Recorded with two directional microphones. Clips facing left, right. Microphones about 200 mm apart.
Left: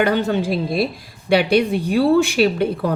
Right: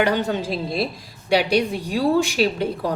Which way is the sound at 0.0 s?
55° left (ahead or behind).